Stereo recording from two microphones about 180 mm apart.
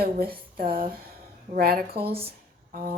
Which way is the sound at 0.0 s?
60° right (ahead or behind).